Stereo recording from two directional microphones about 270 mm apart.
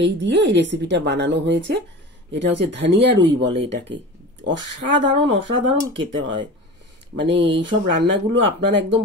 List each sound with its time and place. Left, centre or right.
0.0 s speech: right